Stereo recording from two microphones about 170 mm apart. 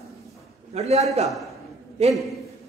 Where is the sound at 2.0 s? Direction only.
40° right (ahead or behind).